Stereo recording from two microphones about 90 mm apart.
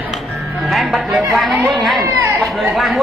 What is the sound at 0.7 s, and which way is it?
A woman's voice, centre (ahead or behind).